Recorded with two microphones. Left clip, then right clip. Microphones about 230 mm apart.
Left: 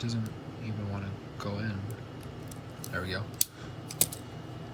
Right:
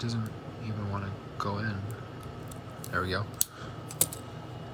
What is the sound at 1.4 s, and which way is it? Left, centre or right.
Speech, centre.